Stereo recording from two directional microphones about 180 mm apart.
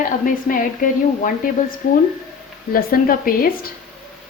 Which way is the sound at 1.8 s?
55° left (ahead or behind).